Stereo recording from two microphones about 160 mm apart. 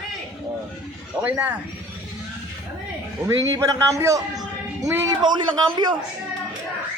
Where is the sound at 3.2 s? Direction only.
20° right (ahead or behind).